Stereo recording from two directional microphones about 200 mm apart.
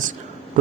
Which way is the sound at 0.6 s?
40° right (ahead or behind).